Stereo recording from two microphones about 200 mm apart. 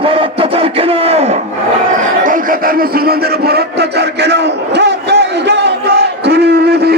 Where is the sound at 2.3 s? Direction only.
45° right (ahead or behind).